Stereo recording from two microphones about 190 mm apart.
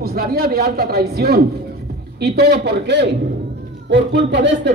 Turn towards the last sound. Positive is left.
turn(degrees=-65)  # may be behind; listen again after turning